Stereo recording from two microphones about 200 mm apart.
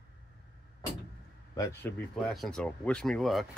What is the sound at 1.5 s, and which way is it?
Speech, 15° left (ahead or behind).